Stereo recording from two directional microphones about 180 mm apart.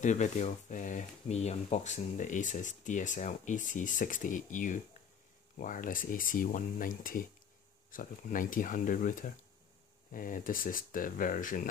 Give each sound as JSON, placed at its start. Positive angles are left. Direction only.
{"t": 0.0, "sound": "speech", "side_deg": 40}